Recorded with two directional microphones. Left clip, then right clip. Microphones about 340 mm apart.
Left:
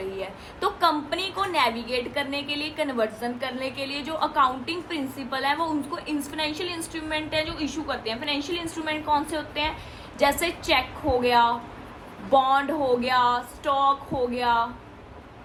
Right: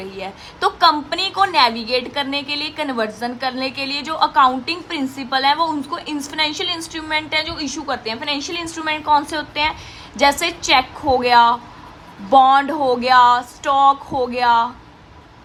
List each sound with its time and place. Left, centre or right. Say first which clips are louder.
0.2 s a woman's voice: right 11 dB; right